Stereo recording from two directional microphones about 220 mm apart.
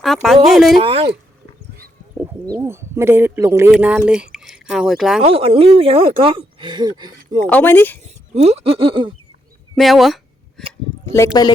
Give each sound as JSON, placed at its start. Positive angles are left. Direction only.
{"t": 0.0, "sound": "speech", "side_deg": 0}
{"t": 0.8, "sound": "speech", "side_deg": -25}
{"t": 2.6, "sound": "speech", "side_deg": -10}
{"t": 5.2, "sound": "speech", "side_deg": -25}
{"t": 7.4, "sound": "speech", "side_deg": 10}
{"t": 8.0, "sound": "speech", "side_deg": -30}
{"t": 9.7, "sound": "speech", "side_deg": 0}
{"t": 11.0, "sound": "speech", "side_deg": 10}